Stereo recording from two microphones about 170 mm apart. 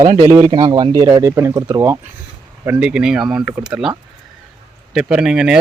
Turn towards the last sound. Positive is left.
turn(degrees=-5)  # may be behind; listen again after turning